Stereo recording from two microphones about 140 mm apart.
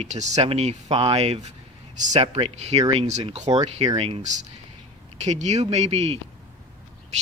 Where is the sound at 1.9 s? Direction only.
60° right (ahead or behind).